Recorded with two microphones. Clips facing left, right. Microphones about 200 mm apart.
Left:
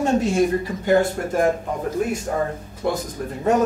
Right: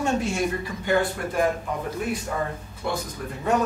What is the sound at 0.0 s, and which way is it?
Speech, 40° left (ahead or behind).